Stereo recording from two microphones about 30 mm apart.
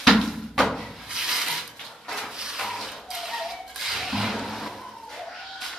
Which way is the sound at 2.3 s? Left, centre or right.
Right.